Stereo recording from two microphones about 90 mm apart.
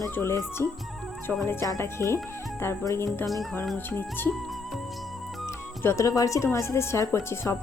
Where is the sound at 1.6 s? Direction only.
35° left (ahead or behind).